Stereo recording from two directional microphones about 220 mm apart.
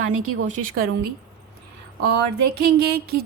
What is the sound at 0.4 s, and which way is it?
Speech, 35° right (ahead or behind).